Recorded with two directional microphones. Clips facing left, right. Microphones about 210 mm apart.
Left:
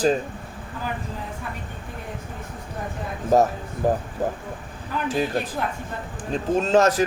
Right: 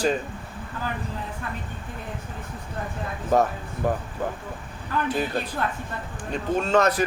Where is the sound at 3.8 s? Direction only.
40° left (ahead or behind).